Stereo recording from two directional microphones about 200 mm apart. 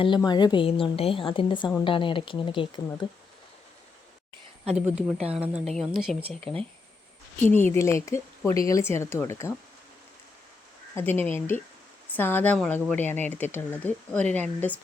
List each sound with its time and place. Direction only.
0.2 s a woman's voice: 20° left (ahead or behind)
4.9 s speech: 5° right (ahead or behind)
7.4 s speech: 10° left (ahead or behind)
10.9 s speech: 10° left (ahead or behind)